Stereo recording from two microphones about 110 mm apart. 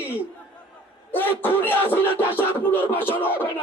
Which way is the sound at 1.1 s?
15° left (ahead or behind).